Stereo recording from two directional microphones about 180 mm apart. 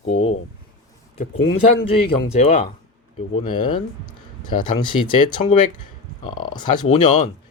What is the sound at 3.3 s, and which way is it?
Speech, 30° left (ahead or behind).